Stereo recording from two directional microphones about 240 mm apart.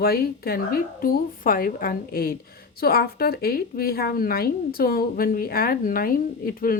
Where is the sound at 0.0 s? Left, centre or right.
Left.